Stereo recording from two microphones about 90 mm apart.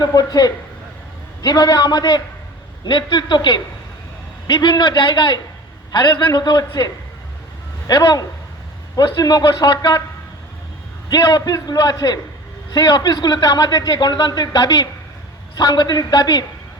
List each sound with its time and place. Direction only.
0.0 s a man's voice: 50° left (ahead or behind)
11.1 s speech: 45° left (ahead or behind)